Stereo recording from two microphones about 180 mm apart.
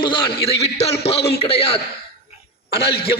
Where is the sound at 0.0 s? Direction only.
30° left (ahead or behind).